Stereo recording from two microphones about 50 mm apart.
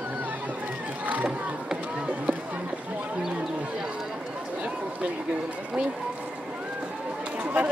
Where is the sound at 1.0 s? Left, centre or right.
Right.